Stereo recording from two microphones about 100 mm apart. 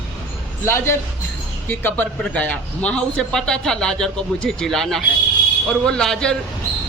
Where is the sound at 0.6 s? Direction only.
25° left (ahead or behind); by 6.4 s 5° left (ahead or behind).